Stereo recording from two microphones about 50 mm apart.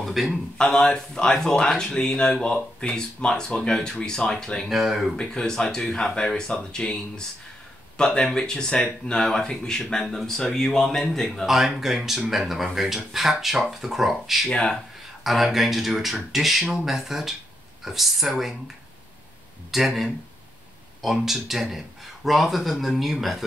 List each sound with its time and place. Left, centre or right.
0.0 s a sound: centre
0.6 s speech: centre
4.6 s speech: centre
5.1 s speech: centre
11.4 s speech: centre
14.5 s speech: centre
15.2 s speech: centre
19.7 s speech: centre